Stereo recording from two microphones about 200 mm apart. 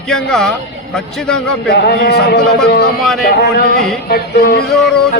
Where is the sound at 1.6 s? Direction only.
50° left (ahead or behind).